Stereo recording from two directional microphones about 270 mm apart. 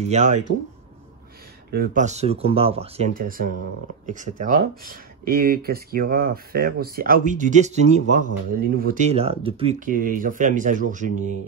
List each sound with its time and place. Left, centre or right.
0.1 s speech: right
1.7 s speech: right